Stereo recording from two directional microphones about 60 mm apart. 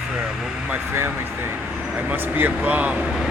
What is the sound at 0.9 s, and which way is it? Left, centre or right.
Speech, right.